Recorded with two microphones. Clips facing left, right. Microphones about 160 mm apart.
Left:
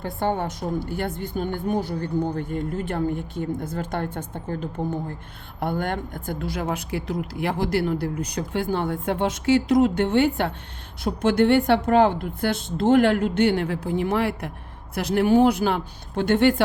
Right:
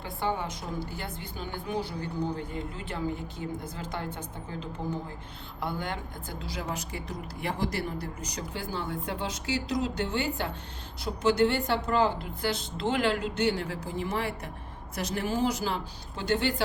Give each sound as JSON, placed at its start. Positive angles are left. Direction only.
{"t": 0.0, "sound": "a woman's voice", "side_deg": 50}